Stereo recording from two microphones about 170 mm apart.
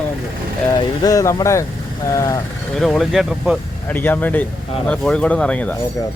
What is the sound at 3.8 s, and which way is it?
Speech, 10° left (ahead or behind).